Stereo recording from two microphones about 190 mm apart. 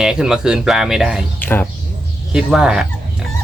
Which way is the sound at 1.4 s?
10° left (ahead or behind).